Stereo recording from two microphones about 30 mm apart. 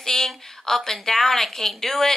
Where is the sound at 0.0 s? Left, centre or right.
Centre.